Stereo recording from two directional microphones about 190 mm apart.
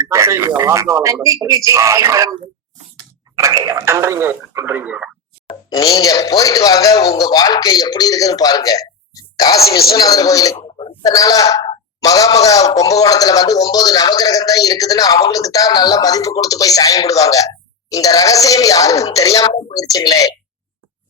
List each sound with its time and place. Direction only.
0.0 s a man's voice: 15° right (ahead or behind)
3.3 s a man's voice: 15° right (ahead or behind)
5.7 s a man's voice: 20° left (ahead or behind)